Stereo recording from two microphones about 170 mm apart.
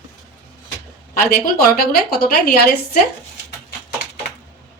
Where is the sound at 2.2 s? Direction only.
65° left (ahead or behind).